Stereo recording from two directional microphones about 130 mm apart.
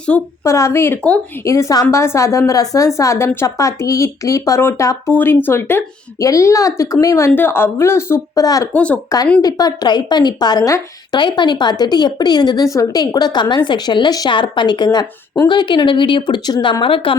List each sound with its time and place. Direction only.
0.1 s speech: 10° left (ahead or behind)
0.4 s a woman's voice: 25° left (ahead or behind)
8.7 s speech: 10° left (ahead or behind)
9.0 s a woman's voice: 30° left (ahead or behind)